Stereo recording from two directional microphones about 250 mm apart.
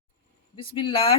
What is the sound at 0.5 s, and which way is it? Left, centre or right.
Speech, centre.